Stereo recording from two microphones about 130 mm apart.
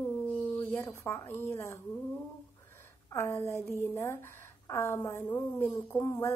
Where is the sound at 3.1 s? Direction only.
20° left (ahead or behind).